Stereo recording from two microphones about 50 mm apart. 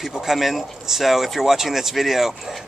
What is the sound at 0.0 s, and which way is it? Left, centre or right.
Speech, centre.